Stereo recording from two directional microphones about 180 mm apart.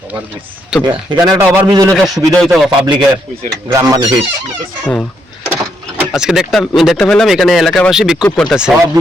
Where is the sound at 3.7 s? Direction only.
20° right (ahead or behind).